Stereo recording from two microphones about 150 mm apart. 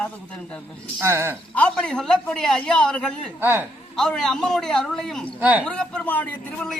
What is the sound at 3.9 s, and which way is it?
A man's voice, 5° left (ahead or behind).